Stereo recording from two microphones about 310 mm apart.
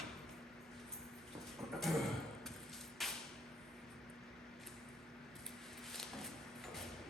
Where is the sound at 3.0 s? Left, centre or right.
Centre.